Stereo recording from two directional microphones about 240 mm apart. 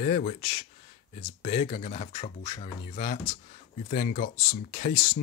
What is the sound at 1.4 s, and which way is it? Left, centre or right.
Speech, left.